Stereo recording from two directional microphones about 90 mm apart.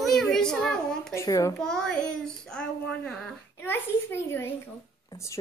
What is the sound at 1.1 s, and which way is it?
Speech, 40° left (ahead or behind).